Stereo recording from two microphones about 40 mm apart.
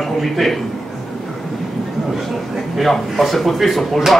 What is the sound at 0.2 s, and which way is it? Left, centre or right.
Speech, centre.